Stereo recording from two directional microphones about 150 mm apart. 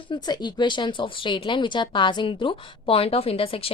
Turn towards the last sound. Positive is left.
turn(degrees=40)  # may be behind; listen again after turning